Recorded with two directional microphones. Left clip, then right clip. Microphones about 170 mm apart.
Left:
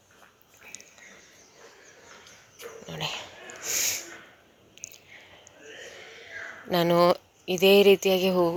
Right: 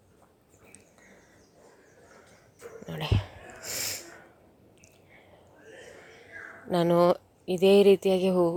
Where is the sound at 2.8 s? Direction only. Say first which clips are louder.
Left 1 dB; 35° right (ahead or behind).